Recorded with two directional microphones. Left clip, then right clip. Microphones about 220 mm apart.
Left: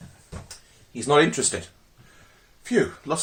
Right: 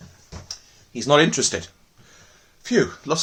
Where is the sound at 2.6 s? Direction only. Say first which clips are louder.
Right 2 dB; 45° right (ahead or behind).